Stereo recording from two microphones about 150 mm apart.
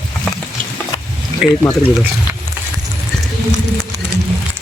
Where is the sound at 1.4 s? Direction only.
5° right (ahead or behind).